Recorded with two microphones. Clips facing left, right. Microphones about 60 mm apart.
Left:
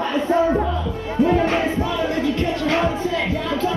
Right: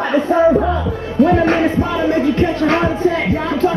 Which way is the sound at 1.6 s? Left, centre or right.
Right.